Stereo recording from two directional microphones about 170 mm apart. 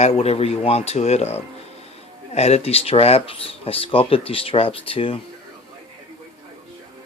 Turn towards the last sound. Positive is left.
turn(degrees=35)  # may be behind; listen again after turning